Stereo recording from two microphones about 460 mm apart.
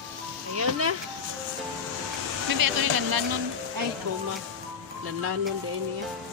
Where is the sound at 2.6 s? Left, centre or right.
Right.